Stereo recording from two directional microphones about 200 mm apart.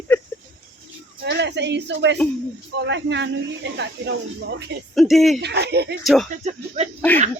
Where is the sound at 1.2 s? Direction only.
60° right (ahead or behind).